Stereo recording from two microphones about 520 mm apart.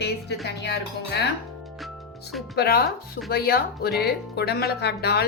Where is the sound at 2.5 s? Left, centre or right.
Centre.